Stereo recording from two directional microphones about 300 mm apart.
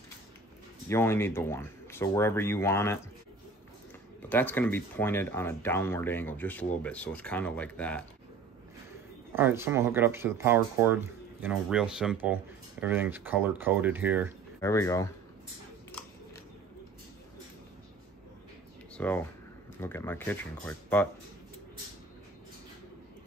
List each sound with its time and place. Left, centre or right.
0.8 s speech: centre
4.2 s speech: centre
9.3 s speech: centre
14.6 s speech: centre
18.9 s speech: centre